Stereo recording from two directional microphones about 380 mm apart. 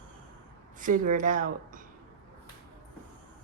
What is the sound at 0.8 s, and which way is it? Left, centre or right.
Speech, right.